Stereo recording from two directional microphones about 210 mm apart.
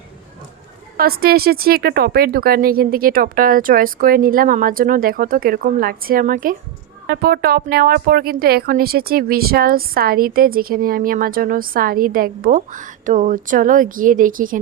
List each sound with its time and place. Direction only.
0.9 s speech: 45° right (ahead or behind)